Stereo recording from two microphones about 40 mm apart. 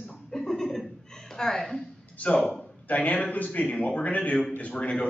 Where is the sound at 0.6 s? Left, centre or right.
Centre.